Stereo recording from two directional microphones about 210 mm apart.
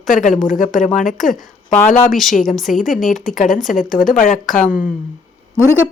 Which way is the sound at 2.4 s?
Centre (ahead or behind).